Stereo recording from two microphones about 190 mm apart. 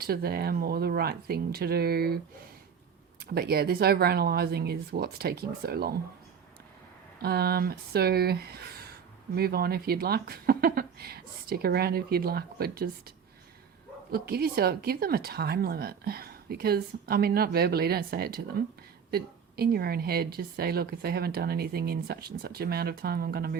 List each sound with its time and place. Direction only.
0.0 s speech: 55° right (ahead or behind)
3.2 s speech: 55° right (ahead or behind)
7.2 s speech: 55° right (ahead or behind)